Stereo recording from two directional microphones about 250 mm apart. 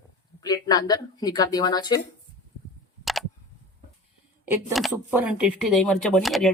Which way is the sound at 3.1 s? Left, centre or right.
Centre.